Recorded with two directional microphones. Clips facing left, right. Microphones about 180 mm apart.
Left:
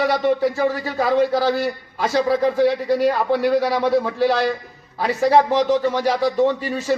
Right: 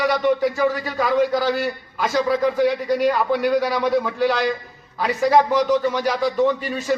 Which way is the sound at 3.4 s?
55° left (ahead or behind).